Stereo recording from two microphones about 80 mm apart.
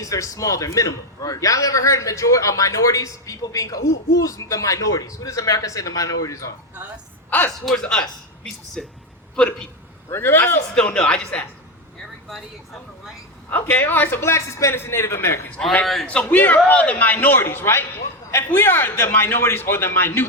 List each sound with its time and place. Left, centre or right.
0.0 s a man's voice: left
7.3 s a sound: left
7.6 s speech: centre
10.1 s a man's voice: left
10.8 s speech: centre
13.5 s a man's voice: left
15.8 s a man's voice: centre
16.0 s a man's voice: centre